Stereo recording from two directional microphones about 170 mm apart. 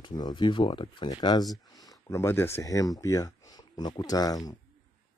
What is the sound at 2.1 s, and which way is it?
Speech, 15° left (ahead or behind).